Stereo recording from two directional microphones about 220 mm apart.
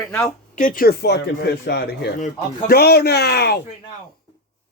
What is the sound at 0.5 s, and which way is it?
A man's voice, 40° left (ahead or behind).